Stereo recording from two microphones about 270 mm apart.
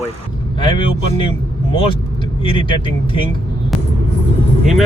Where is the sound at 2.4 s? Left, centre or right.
Centre.